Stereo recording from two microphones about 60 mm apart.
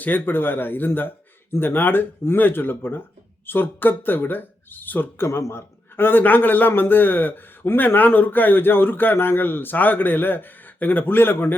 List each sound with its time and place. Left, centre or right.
0.0 s a man's voice: left
5.2 s a man's voice: left